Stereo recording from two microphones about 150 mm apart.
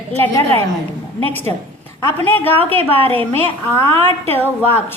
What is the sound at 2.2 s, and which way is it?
Speech, 15° left (ahead or behind).